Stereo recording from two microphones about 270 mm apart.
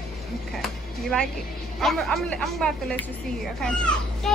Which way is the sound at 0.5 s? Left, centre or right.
Centre.